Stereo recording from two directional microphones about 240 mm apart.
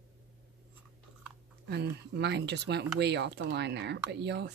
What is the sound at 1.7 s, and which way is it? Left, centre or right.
Speech, right.